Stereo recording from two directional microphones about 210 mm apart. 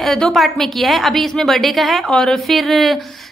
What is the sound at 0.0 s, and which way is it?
A woman's voice, centre (ahead or behind).